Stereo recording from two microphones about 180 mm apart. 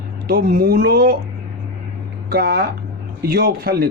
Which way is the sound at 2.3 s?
60° right (ahead or behind).